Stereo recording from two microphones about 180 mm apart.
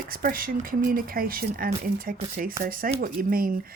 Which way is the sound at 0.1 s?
50° right (ahead or behind).